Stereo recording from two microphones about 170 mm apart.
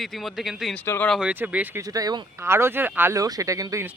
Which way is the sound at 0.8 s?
10° left (ahead or behind).